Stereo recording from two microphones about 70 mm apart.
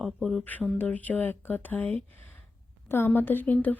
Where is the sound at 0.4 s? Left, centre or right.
Left.